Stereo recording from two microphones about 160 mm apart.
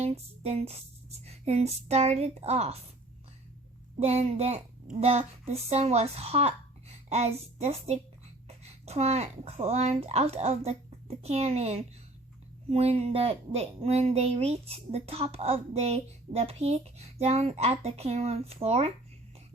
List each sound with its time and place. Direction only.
0.0 s speech: 40° right (ahead or behind)
4.0 s speech: 40° right (ahead or behind)